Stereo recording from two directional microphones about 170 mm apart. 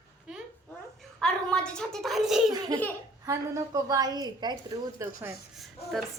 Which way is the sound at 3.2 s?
20° right (ahead or behind).